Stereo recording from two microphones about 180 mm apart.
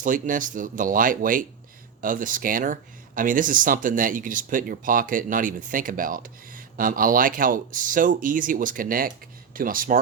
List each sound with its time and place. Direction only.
0.0 s speech: 50° right (ahead or behind)